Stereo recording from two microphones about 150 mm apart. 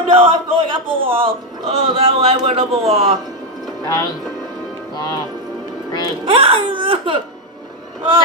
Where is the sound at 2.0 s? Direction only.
40° right (ahead or behind).